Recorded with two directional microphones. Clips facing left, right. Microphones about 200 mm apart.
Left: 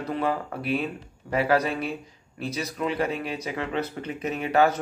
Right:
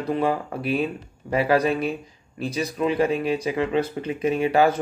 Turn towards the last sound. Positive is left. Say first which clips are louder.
# right 3 dB
turn(degrees=-10)  # may be behind; listen again after turning